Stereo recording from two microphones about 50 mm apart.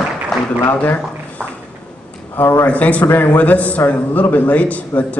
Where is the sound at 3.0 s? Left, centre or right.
Left.